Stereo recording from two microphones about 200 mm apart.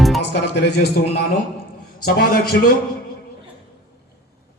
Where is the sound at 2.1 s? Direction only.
50° left (ahead or behind).